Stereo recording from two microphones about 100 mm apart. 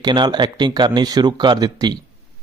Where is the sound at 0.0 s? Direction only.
50° right (ahead or behind).